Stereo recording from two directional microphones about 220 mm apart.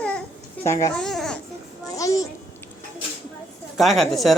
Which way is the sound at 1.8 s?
15° left (ahead or behind).